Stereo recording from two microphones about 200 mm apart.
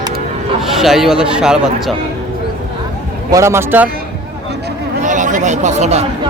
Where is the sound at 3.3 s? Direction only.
15° right (ahead or behind).